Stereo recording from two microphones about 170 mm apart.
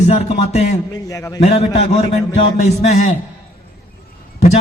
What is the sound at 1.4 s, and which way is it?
A man's voice, 35° left (ahead or behind).